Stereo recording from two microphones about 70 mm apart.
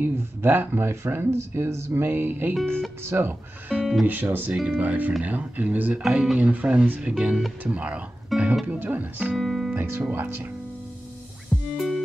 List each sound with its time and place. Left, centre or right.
0.0 s speech: right
8.3 s music: centre
8.7 s speech: right
9.3 s music: centre
9.8 s music: right
10.0 s speech: right
11.7 s music: centre